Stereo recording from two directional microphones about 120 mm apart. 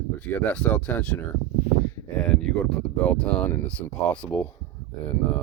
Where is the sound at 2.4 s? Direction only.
5° left (ahead or behind).